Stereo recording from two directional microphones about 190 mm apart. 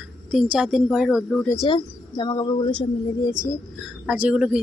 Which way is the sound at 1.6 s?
25° left (ahead or behind).